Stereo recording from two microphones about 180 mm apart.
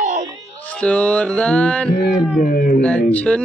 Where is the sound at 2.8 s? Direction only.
5° left (ahead or behind).